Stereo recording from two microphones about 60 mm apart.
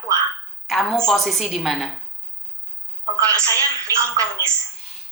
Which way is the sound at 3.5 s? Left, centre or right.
Right.